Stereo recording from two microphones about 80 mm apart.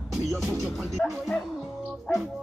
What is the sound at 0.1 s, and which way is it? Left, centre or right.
Music, centre.